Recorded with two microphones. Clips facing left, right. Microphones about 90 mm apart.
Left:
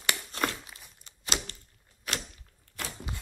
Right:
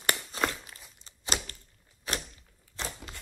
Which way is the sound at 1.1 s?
40° right (ahead or behind).